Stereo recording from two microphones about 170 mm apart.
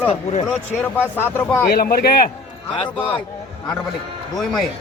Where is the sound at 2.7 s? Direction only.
35° left (ahead or behind).